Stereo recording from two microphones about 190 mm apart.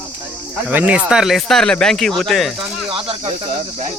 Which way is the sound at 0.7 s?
10° right (ahead or behind).